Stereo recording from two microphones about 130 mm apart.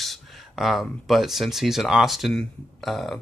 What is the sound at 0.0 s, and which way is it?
Speech, centre (ahead or behind).